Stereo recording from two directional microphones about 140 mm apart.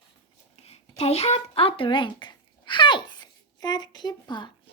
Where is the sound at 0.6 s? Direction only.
45° left (ahead or behind).